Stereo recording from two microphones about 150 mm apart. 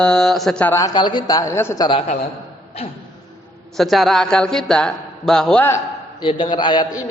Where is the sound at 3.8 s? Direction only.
Centre (ahead or behind).